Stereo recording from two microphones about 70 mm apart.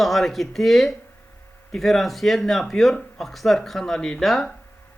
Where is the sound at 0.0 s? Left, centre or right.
Centre.